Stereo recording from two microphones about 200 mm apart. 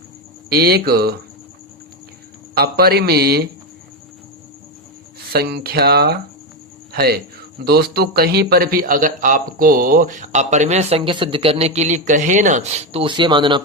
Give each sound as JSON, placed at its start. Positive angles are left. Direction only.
{"t": 0.5, "sound": "a man's voice", "side_deg": -50}
{"t": 2.6, "sound": "a man's voice", "side_deg": -50}
{"t": 5.3, "sound": "a man's voice", "side_deg": -55}